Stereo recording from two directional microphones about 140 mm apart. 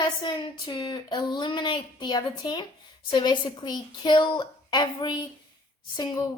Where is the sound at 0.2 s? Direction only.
35° left (ahead or behind).